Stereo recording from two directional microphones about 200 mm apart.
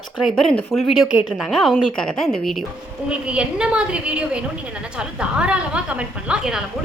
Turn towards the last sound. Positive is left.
turn(degrees=-5)  # may be behind; listen again after turning